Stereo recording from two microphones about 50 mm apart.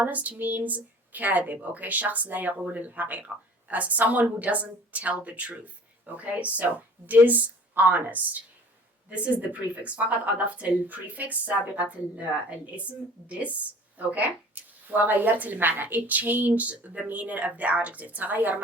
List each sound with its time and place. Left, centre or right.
0.0 s a woman's voice: right